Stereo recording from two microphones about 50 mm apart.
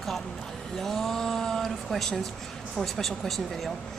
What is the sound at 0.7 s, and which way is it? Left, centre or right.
Speech, centre.